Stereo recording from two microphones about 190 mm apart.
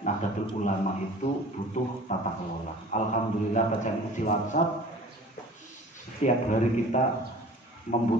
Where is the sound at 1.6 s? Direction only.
45° left (ahead or behind).